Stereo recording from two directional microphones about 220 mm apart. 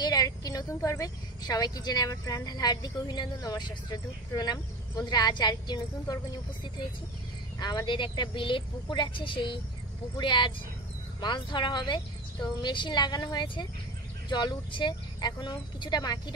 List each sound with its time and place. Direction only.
0.0 s a woman's voice: 15° left (ahead or behind)